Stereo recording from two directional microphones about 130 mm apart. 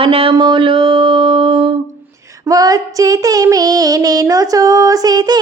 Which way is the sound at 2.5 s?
25° right (ahead or behind).